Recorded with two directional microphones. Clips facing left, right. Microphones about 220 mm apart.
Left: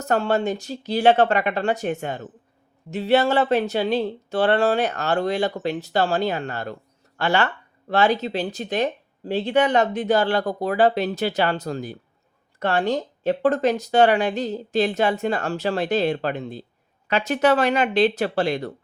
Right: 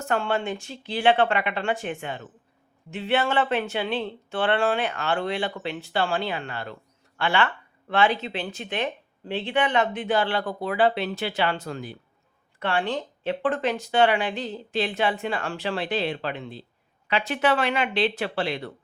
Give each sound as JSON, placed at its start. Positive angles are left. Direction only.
{"t": 0.0, "sound": "speech", "side_deg": 40}